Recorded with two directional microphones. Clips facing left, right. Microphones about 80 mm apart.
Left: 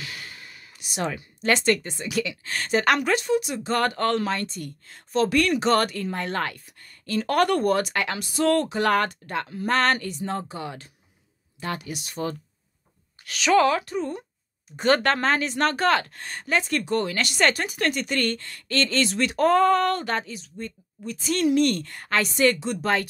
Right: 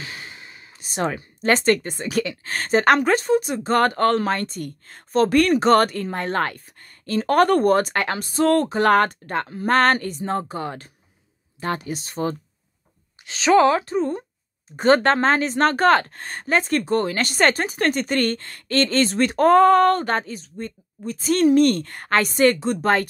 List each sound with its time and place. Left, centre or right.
0.0 s speech: right